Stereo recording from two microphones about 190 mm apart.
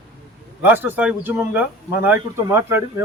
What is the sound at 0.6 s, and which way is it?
Speech, 10° right (ahead or behind).